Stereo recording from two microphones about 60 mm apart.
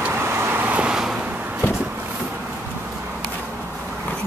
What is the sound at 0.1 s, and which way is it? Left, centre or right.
Vehicle, right.